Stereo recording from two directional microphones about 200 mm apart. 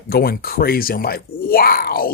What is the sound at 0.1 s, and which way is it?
Speech, 50° left (ahead or behind).